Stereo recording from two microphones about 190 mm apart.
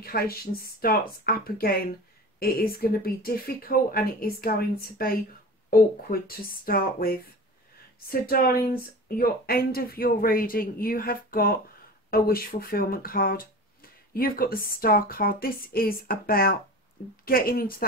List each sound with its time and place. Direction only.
0.0 s speech: 55° left (ahead or behind)